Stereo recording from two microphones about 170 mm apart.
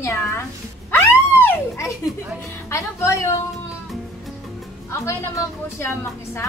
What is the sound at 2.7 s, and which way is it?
Speech, 15° left (ahead or behind).